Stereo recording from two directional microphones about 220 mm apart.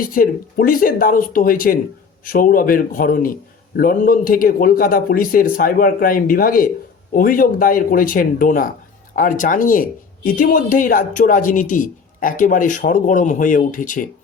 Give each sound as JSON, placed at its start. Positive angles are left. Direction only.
{"t": 0.0, "sound": "speech", "side_deg": 40}